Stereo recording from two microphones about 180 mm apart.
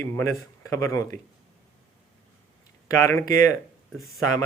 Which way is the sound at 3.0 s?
15° left (ahead or behind).